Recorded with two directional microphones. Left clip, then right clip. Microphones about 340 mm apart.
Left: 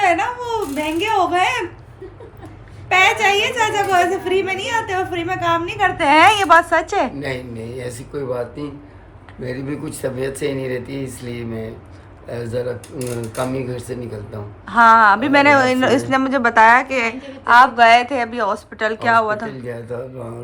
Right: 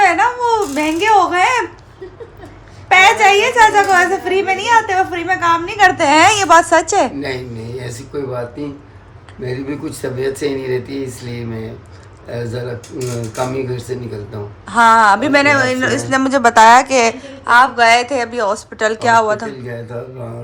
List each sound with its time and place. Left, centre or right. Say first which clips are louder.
0.0 s baby cry: right 5 dB; centre
2.9 s a woman's voice: right 5 dB; centre
13.9 s a woman's voice: right 4 dB; centre